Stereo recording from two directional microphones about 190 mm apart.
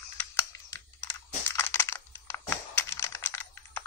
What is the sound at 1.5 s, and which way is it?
Crushing, 15° left (ahead or behind).